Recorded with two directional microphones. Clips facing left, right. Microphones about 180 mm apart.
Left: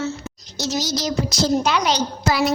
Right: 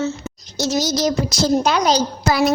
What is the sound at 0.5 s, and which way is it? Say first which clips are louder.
Child singing: right 4 dB; 50° right (ahead or behind).